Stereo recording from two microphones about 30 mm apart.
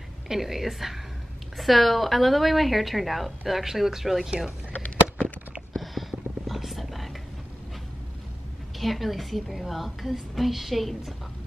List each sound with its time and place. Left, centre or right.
0.3 s a woman's voice: centre
4.7 s a sound: left
5.8 s whispering: centre
8.7 s a woman's voice: centre